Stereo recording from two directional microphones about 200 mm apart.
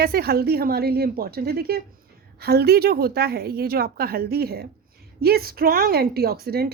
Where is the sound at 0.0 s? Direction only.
50° right (ahead or behind).